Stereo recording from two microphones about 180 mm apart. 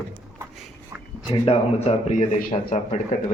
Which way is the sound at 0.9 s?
10° right (ahead or behind).